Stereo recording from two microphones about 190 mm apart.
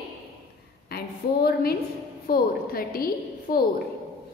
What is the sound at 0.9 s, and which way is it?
A woman's voice, 55° left (ahead or behind).